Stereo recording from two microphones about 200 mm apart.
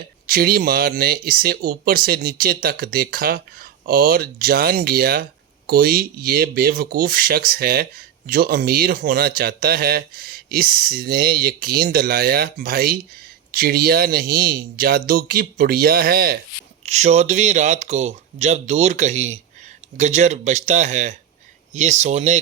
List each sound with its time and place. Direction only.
0.3 s speech: 50° right (ahead or behind)
16.8 s speech: 35° right (ahead or behind)